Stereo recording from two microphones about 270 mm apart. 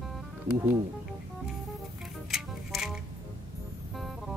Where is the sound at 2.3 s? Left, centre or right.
Centre.